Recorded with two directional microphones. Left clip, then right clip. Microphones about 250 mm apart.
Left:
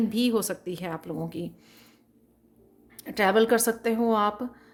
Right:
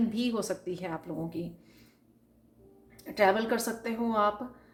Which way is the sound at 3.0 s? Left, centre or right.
Left.